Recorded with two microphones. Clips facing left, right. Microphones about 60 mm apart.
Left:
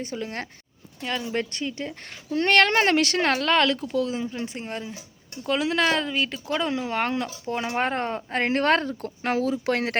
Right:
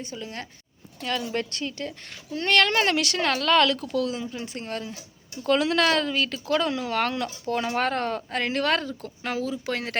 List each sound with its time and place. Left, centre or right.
0.0 s speech: left
1.0 s speech: centre
2.3 s speech: left
4.4 s speech: centre; by 10.0 s left